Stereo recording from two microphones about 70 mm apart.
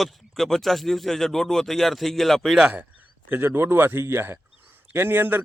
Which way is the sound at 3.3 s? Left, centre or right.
Right.